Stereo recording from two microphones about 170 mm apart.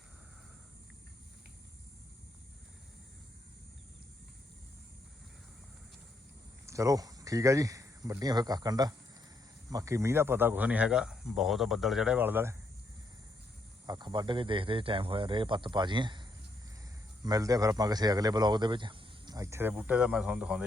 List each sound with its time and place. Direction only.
6.7 s speech: 20° right (ahead or behind)
13.8 s speech: 25° right (ahead or behind)
17.2 s speech: 20° right (ahead or behind); by 20.7 s 5° right (ahead or behind)